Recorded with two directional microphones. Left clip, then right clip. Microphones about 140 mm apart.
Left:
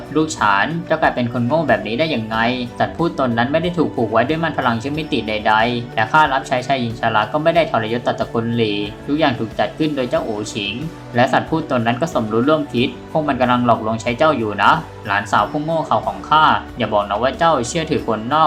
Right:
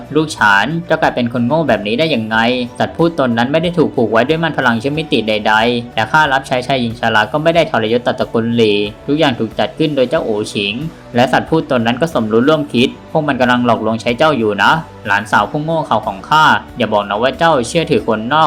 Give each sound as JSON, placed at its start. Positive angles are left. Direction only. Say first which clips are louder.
{"t": 0.1, "sound": "speech", "louder": "right 5 dB", "side_deg": -30}